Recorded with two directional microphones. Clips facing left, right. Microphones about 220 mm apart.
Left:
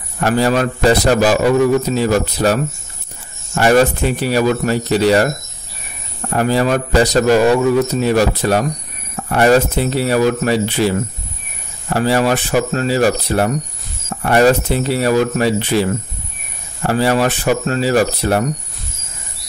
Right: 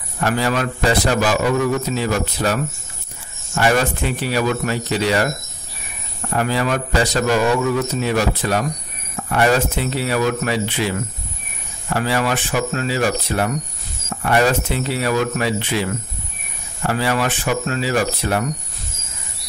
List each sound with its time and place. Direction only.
0.2 s a man's voice: 40° left (ahead or behind)
6.3 s a man's voice: 40° left (ahead or behind)